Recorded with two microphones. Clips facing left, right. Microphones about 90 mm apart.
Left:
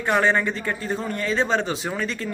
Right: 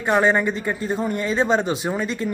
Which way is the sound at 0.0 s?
15° right (ahead or behind).